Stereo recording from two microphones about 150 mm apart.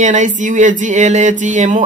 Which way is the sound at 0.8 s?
55° right (ahead or behind).